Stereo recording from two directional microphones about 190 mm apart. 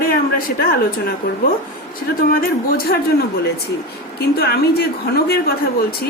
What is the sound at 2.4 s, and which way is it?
Speech, 50° left (ahead or behind).